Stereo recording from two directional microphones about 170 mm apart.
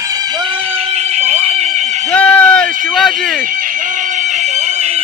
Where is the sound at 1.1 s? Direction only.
40° right (ahead or behind).